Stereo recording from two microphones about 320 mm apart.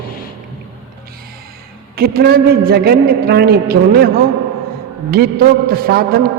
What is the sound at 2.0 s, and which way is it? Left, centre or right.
A man's voice, right.